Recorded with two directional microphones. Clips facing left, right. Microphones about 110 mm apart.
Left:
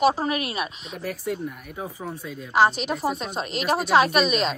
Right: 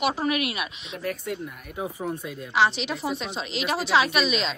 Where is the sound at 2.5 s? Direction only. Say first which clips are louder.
Left 3 dB; 45° left (ahead or behind).